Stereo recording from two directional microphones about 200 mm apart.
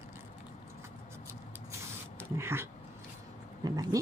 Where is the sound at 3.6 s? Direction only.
20° right (ahead or behind).